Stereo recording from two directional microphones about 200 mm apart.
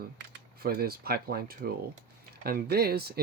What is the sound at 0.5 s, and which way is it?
Speech, 50° right (ahead or behind).